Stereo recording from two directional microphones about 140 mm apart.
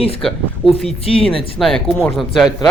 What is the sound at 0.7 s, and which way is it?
Speech, 45° left (ahead or behind).